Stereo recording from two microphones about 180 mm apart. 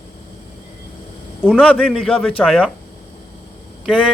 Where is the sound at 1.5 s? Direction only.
5° left (ahead or behind).